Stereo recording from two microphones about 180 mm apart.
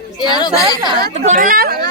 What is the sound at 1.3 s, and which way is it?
Speech, 50° right (ahead or behind).